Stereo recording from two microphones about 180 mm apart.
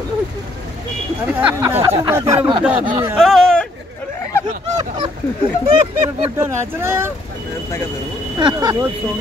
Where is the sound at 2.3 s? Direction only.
30° right (ahead or behind).